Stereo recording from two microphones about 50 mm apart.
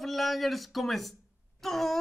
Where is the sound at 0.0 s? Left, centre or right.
Centre.